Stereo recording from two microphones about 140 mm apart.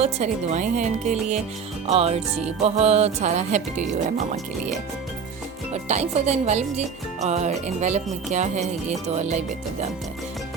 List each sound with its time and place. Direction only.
0.0 s speech: 55° right (ahead or behind)
1.9 s speech: 50° right (ahead or behind)
5.7 s speech: 55° right (ahead or behind)